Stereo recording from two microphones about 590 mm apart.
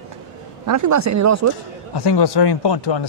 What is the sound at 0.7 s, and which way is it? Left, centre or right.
Speech, right.